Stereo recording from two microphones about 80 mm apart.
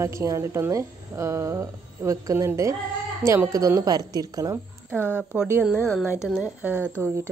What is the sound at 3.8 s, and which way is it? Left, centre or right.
Speech, right.